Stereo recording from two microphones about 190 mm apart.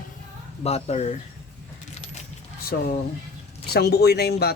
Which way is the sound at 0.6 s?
35° left (ahead or behind).